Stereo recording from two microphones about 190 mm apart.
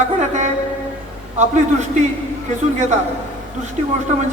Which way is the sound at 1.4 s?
40° right (ahead or behind).